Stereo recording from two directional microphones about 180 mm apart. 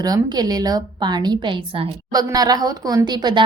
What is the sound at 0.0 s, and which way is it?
A woman's voice, 20° right (ahead or behind).